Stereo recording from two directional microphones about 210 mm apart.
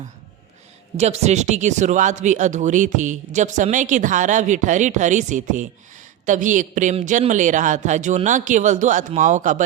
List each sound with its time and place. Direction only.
0.9 s speech: 30° right (ahead or behind)